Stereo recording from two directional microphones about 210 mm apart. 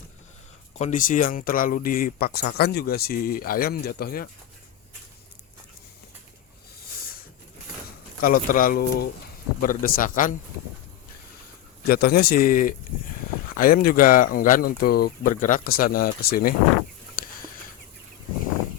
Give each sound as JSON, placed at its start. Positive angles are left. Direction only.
{"t": 0.8, "sound": "speech", "side_deg": 35}
{"t": 8.2, "sound": "speech", "side_deg": 40}
{"t": 11.9, "sound": "speech", "side_deg": 45}
{"t": 17.2, "sound": "a sound", "side_deg": 40}